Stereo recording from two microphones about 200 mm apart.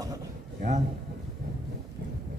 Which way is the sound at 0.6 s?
40° right (ahead or behind).